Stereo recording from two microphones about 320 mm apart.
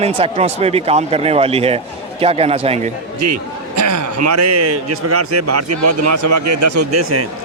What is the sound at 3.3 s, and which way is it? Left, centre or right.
A man's voice, right.